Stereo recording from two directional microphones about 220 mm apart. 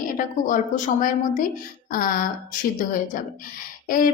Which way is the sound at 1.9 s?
40° left (ahead or behind).